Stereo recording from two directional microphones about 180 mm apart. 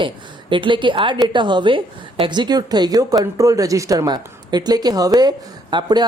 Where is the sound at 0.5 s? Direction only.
25° right (ahead or behind).